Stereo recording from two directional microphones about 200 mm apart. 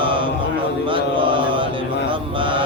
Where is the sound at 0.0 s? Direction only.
25° right (ahead or behind).